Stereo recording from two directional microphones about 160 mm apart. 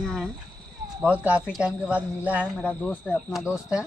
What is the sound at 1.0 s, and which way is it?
Speech, 10° right (ahead or behind).